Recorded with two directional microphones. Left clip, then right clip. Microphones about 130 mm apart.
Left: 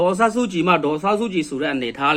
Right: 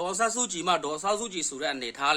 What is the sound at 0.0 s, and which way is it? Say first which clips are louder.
Speech: left 10 dB; 25° right (ahead or behind).